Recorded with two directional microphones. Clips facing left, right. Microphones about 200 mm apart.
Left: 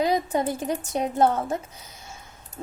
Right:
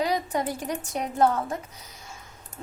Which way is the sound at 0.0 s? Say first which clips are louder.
Left 3 dB; 25° left (ahead or behind).